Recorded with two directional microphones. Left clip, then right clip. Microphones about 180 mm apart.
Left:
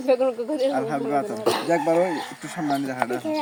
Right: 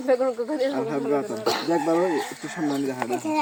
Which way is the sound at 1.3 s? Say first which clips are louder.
Left 2 dB; 50° left (ahead or behind).